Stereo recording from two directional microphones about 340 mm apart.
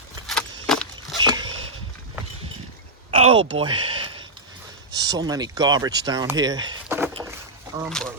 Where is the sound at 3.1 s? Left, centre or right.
Centre.